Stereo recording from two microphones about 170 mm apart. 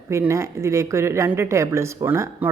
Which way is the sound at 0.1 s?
15° right (ahead or behind).